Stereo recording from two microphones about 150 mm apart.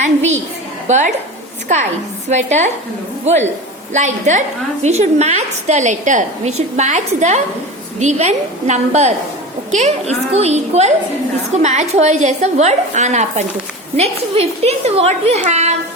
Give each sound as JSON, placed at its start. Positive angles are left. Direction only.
{"t": 0.9, "sound": "a woman's voice", "side_deg": -55}
{"t": 2.3, "sound": "a woman's voice", "side_deg": -50}